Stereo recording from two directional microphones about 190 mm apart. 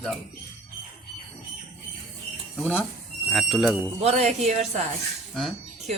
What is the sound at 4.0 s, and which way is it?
Speech, 35° right (ahead or behind).